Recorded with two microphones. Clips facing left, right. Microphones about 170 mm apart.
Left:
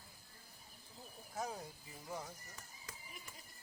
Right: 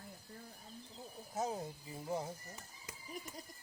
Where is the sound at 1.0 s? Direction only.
25° right (ahead or behind).